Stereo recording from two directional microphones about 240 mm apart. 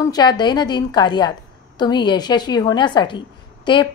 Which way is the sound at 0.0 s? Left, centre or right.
Centre.